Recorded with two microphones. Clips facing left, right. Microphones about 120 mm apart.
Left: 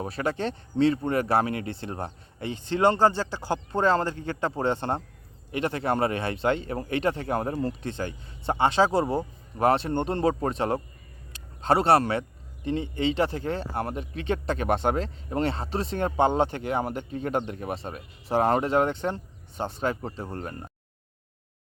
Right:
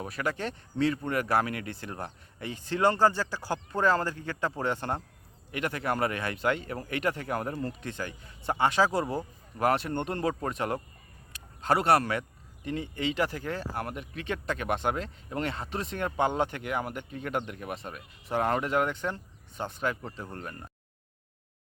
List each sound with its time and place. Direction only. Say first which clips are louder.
0.0 s speech: left 4 dB; 30° left (ahead or behind)
11.3 s a sound: left 3 dB; 25° left (ahead or behind)
12.6 s speech: left 5 dB; 25° left (ahead or behind)